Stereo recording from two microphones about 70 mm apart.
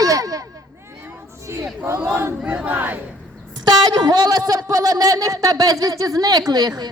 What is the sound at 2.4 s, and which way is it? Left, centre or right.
Crowd, right.